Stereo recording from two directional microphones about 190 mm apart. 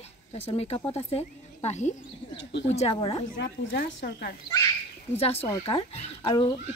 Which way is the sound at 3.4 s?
60° left (ahead or behind).